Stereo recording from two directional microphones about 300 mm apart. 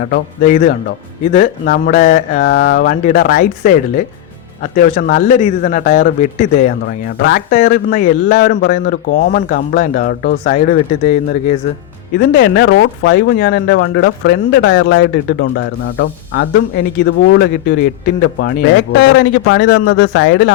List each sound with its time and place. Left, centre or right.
0.0 s a man's voice: left
12.3 s speech: left